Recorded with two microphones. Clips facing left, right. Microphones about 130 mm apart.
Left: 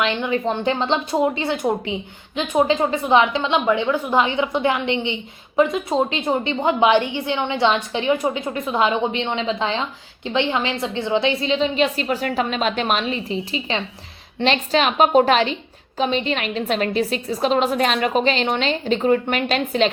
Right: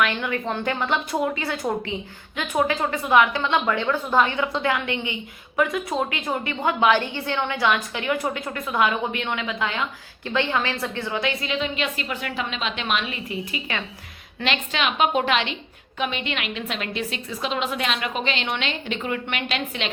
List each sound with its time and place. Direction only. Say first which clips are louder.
0.0 s a woman's voice: left 3 dB; 25° left (ahead or behind); by 19.9 s 40° left (ahead or behind)